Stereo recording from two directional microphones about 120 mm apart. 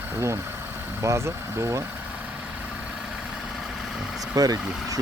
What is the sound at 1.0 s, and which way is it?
Speech, 25° right (ahead or behind).